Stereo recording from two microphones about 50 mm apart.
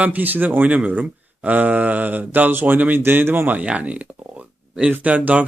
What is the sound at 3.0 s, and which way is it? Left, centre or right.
Speech, right.